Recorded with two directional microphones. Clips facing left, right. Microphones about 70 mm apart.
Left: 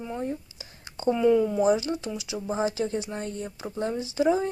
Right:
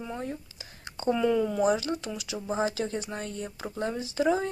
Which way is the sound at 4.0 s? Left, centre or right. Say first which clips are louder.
Left 2 dB; right.